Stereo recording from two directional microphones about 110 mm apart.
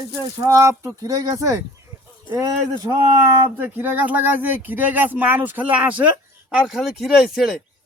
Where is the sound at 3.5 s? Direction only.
20° right (ahead or behind); by 7.5 s centre (ahead or behind).